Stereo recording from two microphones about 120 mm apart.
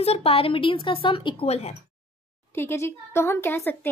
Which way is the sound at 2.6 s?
20° left (ahead or behind).